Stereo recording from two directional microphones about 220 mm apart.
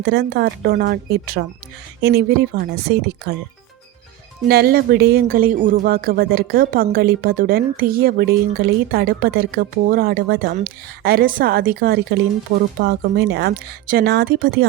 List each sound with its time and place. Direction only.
0.0 s speech: 50° right (ahead or behind)
4.4 s speech: 45° right (ahead or behind)